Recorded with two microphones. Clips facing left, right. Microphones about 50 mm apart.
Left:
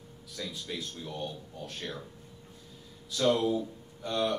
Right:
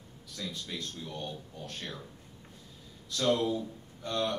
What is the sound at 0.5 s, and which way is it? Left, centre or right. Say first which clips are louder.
A man's voice: even; centre.